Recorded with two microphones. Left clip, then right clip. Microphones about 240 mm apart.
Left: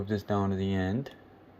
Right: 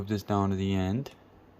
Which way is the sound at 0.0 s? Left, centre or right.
Right.